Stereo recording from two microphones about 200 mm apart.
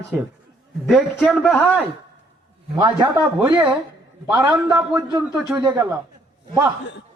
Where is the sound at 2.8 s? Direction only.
20° right (ahead or behind).